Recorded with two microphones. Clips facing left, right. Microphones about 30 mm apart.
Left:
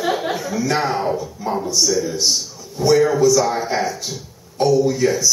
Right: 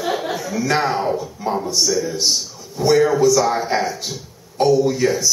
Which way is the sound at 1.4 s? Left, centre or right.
Right.